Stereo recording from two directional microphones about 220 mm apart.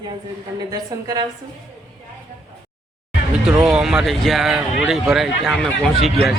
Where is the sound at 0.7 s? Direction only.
15° right (ahead or behind).